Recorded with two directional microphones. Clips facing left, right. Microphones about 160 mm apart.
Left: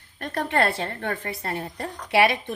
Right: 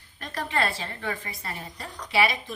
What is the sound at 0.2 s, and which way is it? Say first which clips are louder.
A woman's voice: left 5 dB; 60° left (ahead or behind).